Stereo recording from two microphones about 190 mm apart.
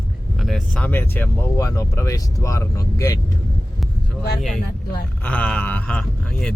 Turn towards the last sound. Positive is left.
turn(degrees=5)  # may be behind; listen again after turning